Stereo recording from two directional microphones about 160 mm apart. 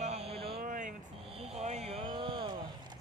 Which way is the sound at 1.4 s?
45° right (ahead or behind).